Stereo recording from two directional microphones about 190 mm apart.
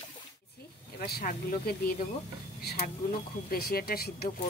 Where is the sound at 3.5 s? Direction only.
55° left (ahead or behind).